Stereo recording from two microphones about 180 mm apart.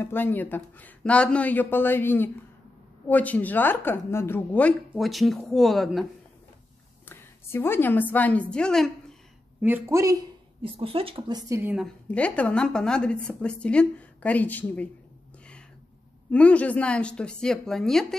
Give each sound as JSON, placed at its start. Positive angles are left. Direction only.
{"t": 0.0, "sound": "a woman's voice", "side_deg": 10}
{"t": 7.1, "sound": "a woman's voice", "side_deg": 15}
{"t": 9.6, "sound": "speech", "side_deg": -10}
{"t": 10.6, "sound": "a woman's voice", "side_deg": -30}
{"t": 11.7, "sound": "a woman's voice", "side_deg": 5}
{"t": 16.3, "sound": "a woman's voice", "side_deg": 5}